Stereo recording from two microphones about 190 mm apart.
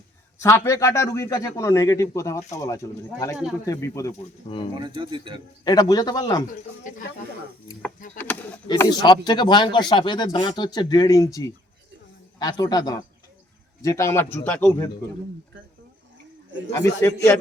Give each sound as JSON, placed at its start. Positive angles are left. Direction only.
{"t": 0.4, "sound": "a man's voice", "side_deg": 15}
{"t": 4.8, "sound": "speech", "side_deg": -25}
{"t": 5.6, "sound": "speech", "side_deg": 20}
{"t": 6.9, "sound": "speech", "side_deg": 45}
{"t": 8.2, "sound": "a man's voice", "side_deg": 10}
{"t": 8.8, "sound": "a man's voice", "side_deg": 20}
{"t": 17.0, "sound": "a man's voice", "side_deg": 15}